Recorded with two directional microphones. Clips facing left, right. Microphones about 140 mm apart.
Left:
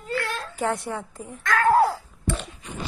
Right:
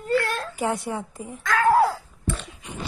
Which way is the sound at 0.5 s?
10° right (ahead or behind).